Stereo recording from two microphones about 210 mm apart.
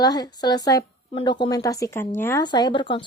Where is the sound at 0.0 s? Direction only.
20° left (ahead or behind).